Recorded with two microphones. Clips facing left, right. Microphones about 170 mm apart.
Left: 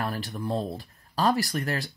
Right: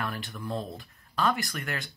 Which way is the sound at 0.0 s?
35° left (ahead or behind).